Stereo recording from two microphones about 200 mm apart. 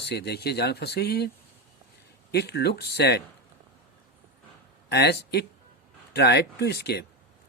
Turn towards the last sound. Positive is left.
turn(degrees=55)  # may be behind; listen again after turning